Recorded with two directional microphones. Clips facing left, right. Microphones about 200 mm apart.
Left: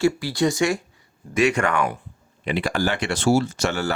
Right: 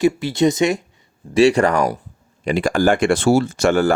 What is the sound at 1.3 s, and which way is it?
Speech, 35° right (ahead or behind).